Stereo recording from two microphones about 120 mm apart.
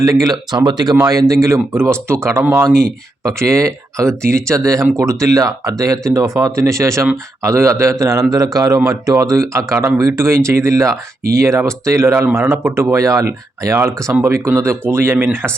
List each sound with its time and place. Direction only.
0.0 s speech: 30° right (ahead or behind)